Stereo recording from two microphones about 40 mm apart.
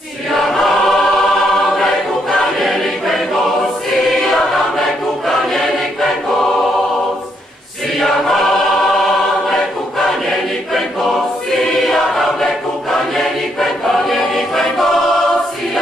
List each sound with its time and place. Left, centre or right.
0.3 s choir: centre
2.6 s choir: centre
11.6 s choir: centre